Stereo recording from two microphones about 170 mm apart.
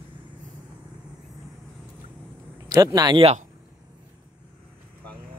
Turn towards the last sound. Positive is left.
turn(degrees=-35)  # may be behind; listen again after turning